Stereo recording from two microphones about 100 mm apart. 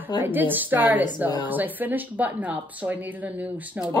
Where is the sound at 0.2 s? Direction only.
20° right (ahead or behind).